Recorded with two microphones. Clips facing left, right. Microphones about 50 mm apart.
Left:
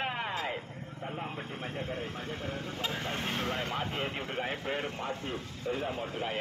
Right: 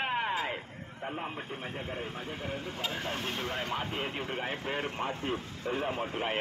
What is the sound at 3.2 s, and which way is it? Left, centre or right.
Speech, centre.